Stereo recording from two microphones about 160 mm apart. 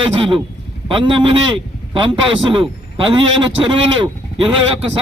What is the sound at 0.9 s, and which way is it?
A man's voice, 30° right (ahead or behind).